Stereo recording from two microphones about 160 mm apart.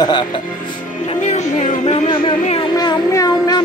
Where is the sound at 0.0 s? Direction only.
30° left (ahead or behind).